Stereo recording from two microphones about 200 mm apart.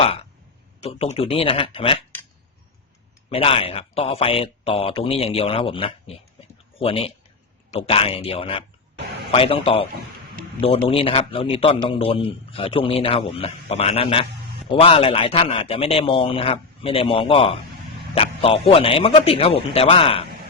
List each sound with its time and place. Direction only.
0.0 s a sound: 30° left (ahead or behind)
0.8 s a man's voice: 30° left (ahead or behind)
3.2 s a man's voice: 25° left (ahead or behind)
10.8 s a man's voice: 30° left (ahead or behind)